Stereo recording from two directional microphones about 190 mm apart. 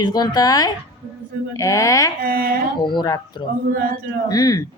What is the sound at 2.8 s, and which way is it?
Speech, 25° left (ahead or behind).